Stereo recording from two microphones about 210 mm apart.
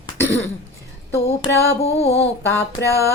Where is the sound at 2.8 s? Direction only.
15° right (ahead or behind).